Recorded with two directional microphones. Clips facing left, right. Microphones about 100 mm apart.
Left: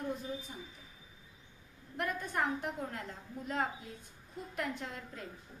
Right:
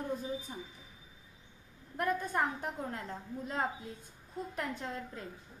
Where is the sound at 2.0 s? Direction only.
35° right (ahead or behind).